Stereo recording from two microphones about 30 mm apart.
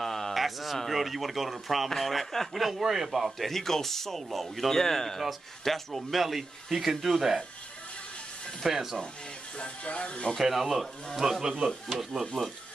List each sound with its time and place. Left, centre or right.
0.0 s a sound: centre
0.4 s a sound: centre
0.7 s a man's voice: centre
3.3 s speech: centre
8.6 s a man's voice: centre
9.6 s music: left
10.3 s a man's voice: centre